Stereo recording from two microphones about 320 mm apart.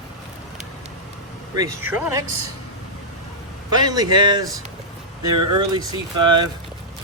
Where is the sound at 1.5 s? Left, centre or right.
Centre.